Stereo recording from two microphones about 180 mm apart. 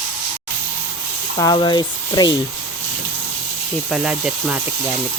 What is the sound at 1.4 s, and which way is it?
Speech, 25° left (ahead or behind).